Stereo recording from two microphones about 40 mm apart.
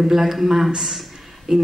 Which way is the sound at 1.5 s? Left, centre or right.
Centre.